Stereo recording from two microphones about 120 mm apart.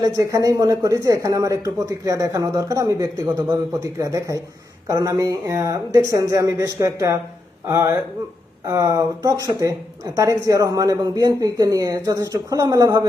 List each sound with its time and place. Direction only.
0.0 s speech: 25° right (ahead or behind)